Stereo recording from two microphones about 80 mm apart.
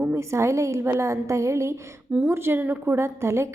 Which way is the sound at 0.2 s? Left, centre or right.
Right.